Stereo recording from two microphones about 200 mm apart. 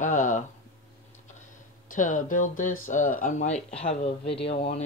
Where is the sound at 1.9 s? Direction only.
40° left (ahead or behind).